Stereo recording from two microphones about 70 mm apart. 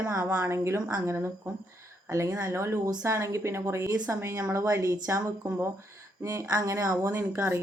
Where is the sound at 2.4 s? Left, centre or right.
Right.